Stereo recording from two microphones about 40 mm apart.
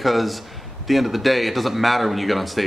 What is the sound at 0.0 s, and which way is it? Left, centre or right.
A man's voice, centre.